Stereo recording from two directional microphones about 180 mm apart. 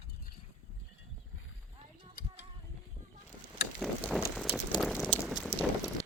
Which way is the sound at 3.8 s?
Centre (ahead or behind).